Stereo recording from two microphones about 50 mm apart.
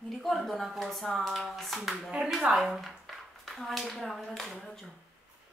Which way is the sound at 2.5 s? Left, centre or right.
Centre.